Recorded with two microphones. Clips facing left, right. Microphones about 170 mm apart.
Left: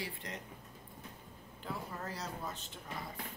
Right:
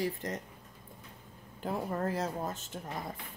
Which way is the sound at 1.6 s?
50° right (ahead or behind).